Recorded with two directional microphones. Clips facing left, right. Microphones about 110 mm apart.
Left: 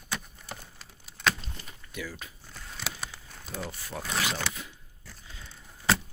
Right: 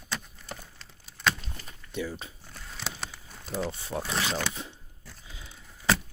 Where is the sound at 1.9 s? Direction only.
25° right (ahead or behind).